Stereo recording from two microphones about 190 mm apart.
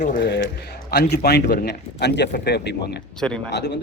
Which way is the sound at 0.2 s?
60° left (ahead or behind).